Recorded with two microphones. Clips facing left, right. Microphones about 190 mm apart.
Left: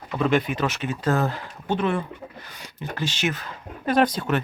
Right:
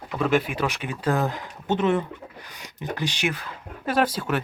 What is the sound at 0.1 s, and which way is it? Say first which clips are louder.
Speech: left 1 dB; 5° right (ahead or behind).